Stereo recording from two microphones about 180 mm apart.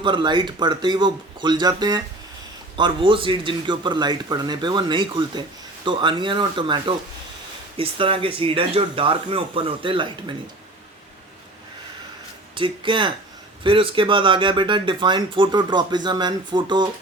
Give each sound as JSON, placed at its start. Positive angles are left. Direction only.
{"t": 0.0, "sound": "a man's voice", "side_deg": -25}
{"t": 12.5, "sound": "a man's voice", "side_deg": -30}